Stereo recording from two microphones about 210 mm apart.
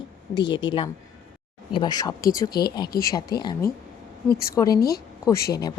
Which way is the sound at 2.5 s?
45° left (ahead or behind).